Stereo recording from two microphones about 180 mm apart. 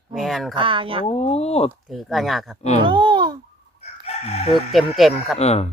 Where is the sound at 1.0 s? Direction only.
35° left (ahead or behind).